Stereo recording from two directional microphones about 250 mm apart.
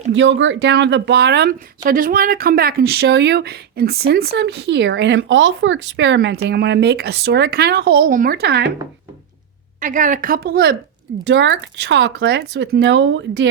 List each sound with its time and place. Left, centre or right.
0.1 s speech: right
9.8 s speech: right